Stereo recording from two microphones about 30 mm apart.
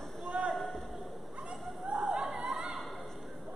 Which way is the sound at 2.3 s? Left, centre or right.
Right.